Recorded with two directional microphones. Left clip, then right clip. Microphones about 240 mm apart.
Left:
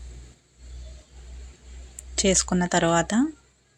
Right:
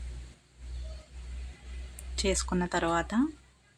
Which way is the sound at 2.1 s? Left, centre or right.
Centre.